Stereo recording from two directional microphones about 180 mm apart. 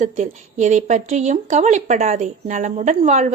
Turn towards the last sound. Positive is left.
turn(degrees=-40)  # may be behind; listen again after turning